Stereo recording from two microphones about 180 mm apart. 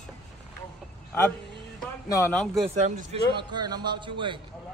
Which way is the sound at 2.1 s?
15° left (ahead or behind).